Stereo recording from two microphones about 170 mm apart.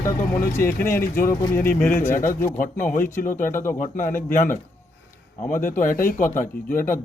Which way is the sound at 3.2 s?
55° left (ahead or behind).